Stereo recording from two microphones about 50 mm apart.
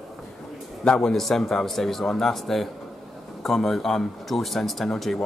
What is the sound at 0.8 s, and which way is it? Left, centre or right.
A man's voice, centre.